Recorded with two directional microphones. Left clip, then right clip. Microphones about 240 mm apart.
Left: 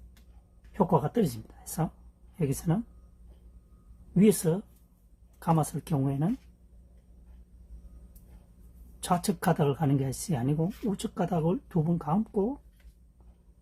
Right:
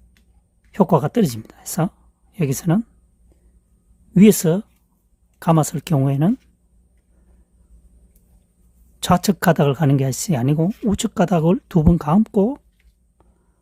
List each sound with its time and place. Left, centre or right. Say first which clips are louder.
0.7 s speech: right 9 dB; right
4.1 s speech: right 10 dB; right
9.0 s speech: right 11 dB; right